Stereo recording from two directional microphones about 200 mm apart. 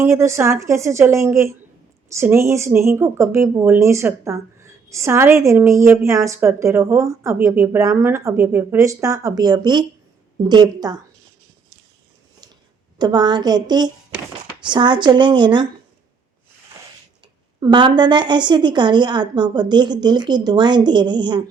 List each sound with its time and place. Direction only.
0.0 s a woman's voice: 15° right (ahead or behind)
13.0 s a woman's voice: 20° right (ahead or behind)
17.6 s a woman's voice: 20° right (ahead or behind)